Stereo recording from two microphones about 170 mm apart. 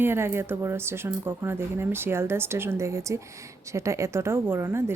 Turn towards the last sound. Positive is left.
turn(degrees=-15)  # may be behind; listen again after turning